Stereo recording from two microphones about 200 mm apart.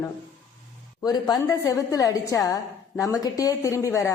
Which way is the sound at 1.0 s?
20° left (ahead or behind).